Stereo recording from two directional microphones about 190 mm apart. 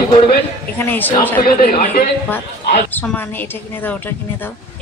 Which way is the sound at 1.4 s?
50° left (ahead or behind).